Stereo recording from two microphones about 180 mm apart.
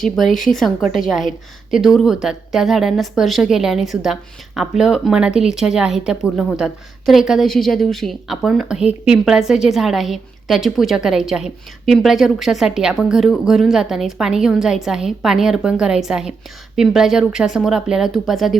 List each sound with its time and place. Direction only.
0.0 s a woman's voice: centre (ahead or behind)